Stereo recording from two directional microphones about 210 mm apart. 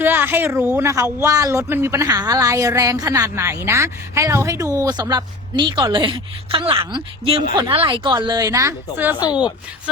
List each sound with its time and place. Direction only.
0.0 s speech: 10° right (ahead or behind)
9.1 s speech: 20° left (ahead or behind)